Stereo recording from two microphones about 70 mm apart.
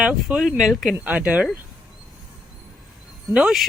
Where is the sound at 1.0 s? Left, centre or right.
Centre.